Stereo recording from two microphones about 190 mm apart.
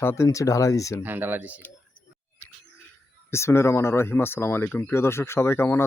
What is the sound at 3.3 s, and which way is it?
Speech, 15° left (ahead or behind).